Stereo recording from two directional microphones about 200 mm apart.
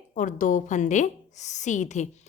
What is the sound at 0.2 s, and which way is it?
A woman's voice, 40° left (ahead or behind).